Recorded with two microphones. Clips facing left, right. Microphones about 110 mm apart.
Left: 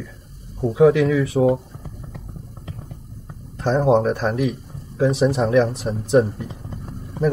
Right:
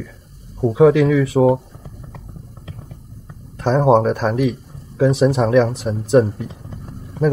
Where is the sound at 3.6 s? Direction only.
90° right.